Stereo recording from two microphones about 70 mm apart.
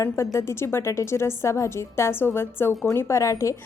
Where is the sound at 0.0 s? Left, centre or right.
Left.